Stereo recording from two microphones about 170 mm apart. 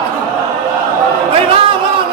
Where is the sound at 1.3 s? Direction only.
30° right (ahead or behind).